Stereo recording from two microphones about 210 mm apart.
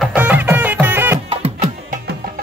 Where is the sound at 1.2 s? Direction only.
25° right (ahead or behind).